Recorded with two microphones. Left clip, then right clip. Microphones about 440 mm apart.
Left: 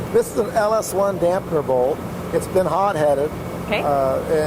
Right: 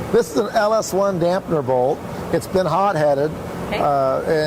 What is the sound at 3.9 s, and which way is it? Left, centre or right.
Speech, right.